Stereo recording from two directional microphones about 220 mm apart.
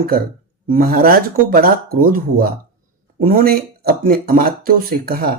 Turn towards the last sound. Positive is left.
turn(degrees=-45)  # may be behind; listen again after turning